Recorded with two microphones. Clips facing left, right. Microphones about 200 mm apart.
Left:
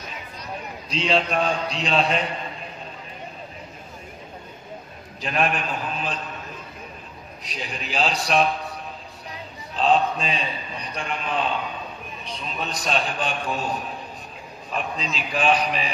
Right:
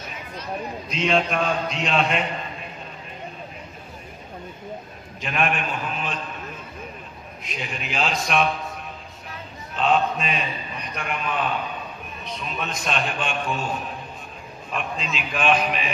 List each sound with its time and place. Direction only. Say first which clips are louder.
0.8 s a man's voice: even; 30° left (ahead or behind)
5.2 s a man's voice: left 1 dB; 35° left (ahead or behind)
7.4 s a man's voice: right 1 dB; 35° left (ahead or behind)
9.8 s a man's voice: left 1 dB; 30° left (ahead or behind)
14.7 s a man's voice: left 1 dB; 35° left (ahead or behind)